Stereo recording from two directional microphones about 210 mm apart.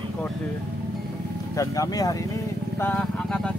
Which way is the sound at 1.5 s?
15° left (ahead or behind).